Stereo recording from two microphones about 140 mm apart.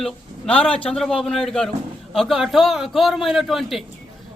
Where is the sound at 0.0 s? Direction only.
5° left (ahead or behind).